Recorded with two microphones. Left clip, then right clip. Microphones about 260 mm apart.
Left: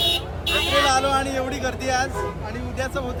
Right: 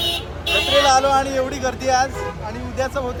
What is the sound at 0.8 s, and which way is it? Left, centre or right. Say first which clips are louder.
Speech: right 4 dB; centre.